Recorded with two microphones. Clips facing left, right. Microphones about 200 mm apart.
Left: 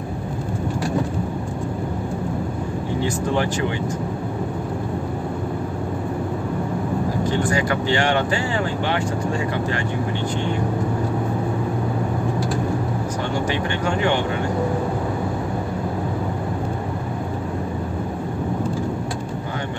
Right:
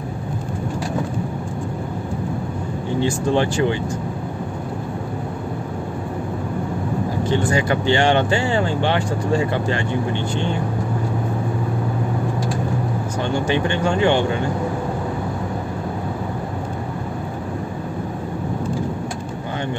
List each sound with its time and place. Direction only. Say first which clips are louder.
3.0 s speech: right 4 dB; 30° right (ahead or behind)
7.5 s speech: right 2 dB; 25° right (ahead or behind)
13.5 s speech: right 3 dB; 30° right (ahead or behind)